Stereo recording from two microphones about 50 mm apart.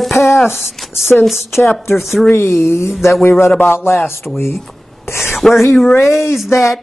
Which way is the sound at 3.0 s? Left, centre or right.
Left.